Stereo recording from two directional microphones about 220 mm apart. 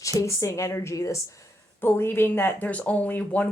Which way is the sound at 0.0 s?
15° left (ahead or behind).